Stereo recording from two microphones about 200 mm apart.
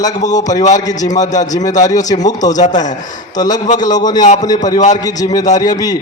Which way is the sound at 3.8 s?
20° left (ahead or behind).